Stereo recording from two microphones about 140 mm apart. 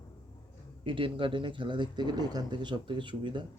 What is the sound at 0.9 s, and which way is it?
Speech, 40° right (ahead or behind).